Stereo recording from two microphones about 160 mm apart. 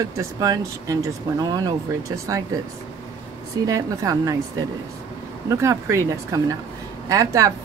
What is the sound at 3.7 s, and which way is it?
Speech, 20° right (ahead or behind).